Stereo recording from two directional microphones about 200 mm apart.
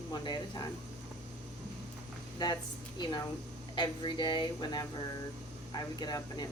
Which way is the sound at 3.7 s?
25° left (ahead or behind).